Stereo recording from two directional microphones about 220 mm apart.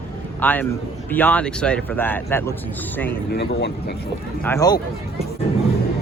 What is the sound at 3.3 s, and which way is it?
Speech, 50° left (ahead or behind).